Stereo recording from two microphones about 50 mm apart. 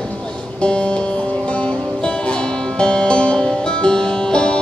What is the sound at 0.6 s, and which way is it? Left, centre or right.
Music, left.